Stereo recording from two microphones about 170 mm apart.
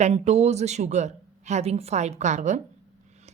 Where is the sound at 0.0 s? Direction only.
40° right (ahead or behind).